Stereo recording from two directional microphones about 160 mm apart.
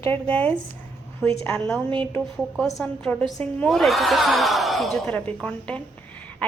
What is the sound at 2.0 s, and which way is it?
A woman's voice, 10° left (ahead or behind).